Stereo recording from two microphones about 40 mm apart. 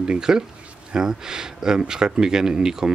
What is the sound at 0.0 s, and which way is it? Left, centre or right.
Speech, centre.